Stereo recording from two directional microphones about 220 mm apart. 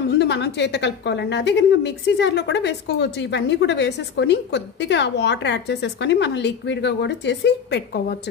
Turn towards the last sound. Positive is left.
turn(degrees=50)  # may be behind; listen again after turning